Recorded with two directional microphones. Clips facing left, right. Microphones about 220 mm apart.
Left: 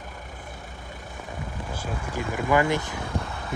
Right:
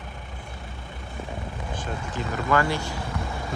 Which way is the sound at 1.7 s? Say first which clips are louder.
Even; 10° left (ahead or behind).